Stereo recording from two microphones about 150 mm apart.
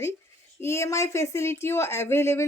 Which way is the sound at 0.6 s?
15° left (ahead or behind).